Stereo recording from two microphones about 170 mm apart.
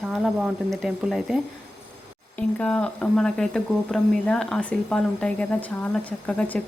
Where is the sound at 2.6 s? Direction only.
5° left (ahead or behind).